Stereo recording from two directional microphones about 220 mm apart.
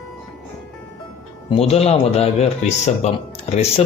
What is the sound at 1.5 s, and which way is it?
Speech, 25° left (ahead or behind).